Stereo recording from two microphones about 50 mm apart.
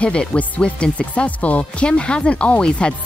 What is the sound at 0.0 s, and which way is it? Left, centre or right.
Speech, left.